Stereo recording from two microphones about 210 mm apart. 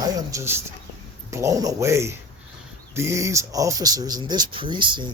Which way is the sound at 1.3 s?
15° right (ahead or behind).